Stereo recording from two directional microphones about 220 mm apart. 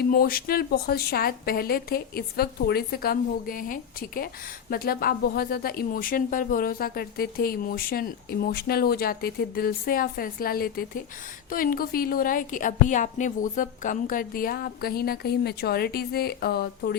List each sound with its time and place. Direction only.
0.0 s a woman's voice: 40° left (ahead or behind)